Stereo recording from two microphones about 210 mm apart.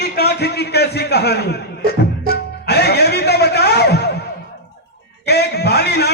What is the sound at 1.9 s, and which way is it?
Music, 45° left (ahead or behind).